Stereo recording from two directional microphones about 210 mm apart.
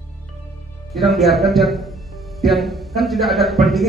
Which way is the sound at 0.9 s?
Centre (ahead or behind).